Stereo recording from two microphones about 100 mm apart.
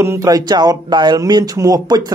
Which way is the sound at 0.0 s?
35° right (ahead or behind).